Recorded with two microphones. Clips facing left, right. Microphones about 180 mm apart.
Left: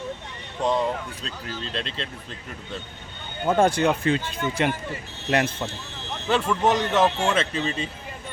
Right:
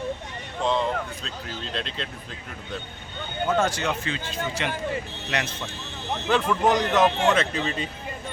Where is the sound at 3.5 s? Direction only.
55° left (ahead or behind).